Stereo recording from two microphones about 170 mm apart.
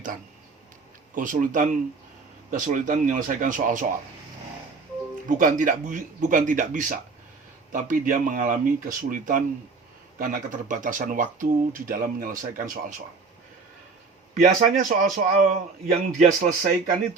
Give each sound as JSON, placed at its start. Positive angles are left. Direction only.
{"t": 1.1, "sound": "speech", "side_deg": -50}
{"t": 5.4, "sound": "speech", "side_deg": -50}
{"t": 14.3, "sound": "speech", "side_deg": -50}